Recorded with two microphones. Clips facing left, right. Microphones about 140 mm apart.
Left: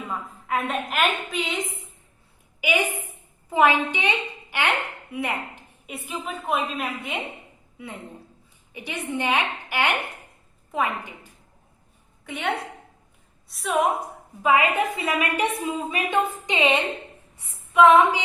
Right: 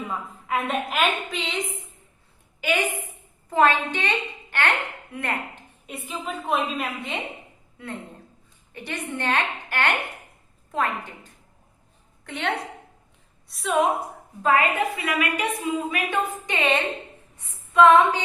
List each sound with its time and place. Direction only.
0.1 s a woman's voice: centre (ahead or behind)
8.7 s a woman's voice: 10° left (ahead or behind)
14.4 s a woman's voice: 15° left (ahead or behind)
14.9 s a woman's voice: 25° left (ahead or behind)
17.3 s female singing: 10° left (ahead or behind)